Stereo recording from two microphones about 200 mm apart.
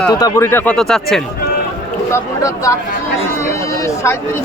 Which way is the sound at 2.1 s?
15° left (ahead or behind).